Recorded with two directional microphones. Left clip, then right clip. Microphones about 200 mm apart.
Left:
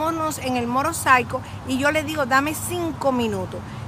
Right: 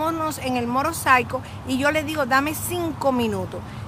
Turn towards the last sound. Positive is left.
turn(degrees=-15)  # may be behind; listen again after turning